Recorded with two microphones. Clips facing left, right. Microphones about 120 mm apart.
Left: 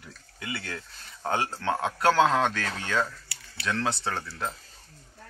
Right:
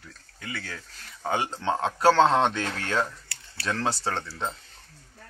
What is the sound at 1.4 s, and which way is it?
Speech, 20° right (ahead or behind).